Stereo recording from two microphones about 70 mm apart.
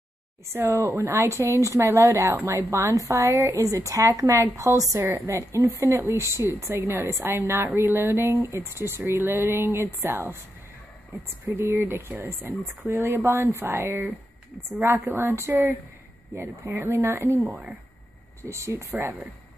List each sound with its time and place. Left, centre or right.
0.5 s a woman's voice: right
15.1 s a woman's voice: right
17.5 s speech: right
18.4 s speech: right